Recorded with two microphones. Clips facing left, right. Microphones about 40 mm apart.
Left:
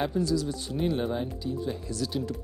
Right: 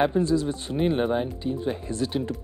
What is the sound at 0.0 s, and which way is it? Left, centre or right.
Speech, right.